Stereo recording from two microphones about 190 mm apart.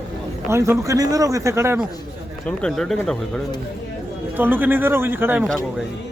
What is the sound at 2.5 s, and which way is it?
Speech, 5° left (ahead or behind).